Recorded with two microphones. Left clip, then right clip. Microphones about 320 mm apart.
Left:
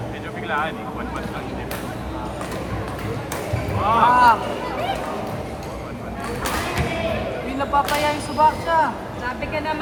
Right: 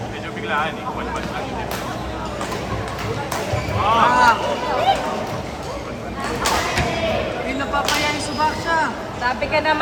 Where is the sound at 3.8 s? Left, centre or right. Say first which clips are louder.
Even; centre.